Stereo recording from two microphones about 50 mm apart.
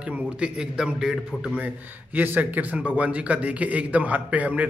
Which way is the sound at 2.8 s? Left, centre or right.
Right.